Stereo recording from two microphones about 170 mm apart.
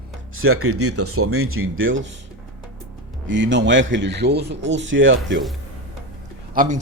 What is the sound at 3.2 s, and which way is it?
A man's voice, 90° right.